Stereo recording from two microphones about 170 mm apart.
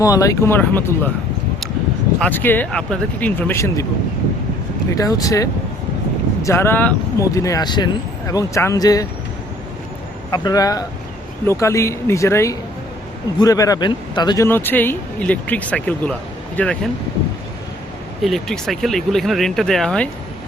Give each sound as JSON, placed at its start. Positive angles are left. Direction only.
{"t": 0.0, "sound": "speech", "side_deg": 20}
{"t": 2.1, "sound": "speech", "side_deg": 10}
{"t": 4.9, "sound": "speech", "side_deg": 20}
{"t": 10.3, "sound": "speech", "side_deg": 25}
{"t": 14.4, "sound": "speech", "side_deg": 10}
{"t": 18.2, "sound": "speech", "side_deg": 0}